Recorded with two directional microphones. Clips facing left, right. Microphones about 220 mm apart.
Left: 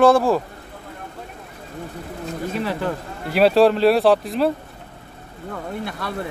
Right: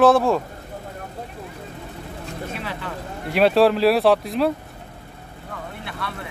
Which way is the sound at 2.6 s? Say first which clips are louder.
Left 8 dB; 40° left (ahead or behind).